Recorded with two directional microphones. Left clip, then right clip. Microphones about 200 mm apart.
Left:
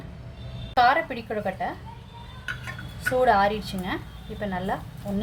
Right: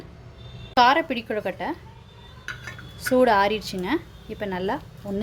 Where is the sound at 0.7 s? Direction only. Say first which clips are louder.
Right 2 dB; 50° right (ahead or behind).